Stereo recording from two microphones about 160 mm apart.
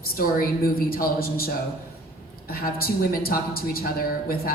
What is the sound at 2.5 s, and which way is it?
A woman's voice, 70° left (ahead or behind).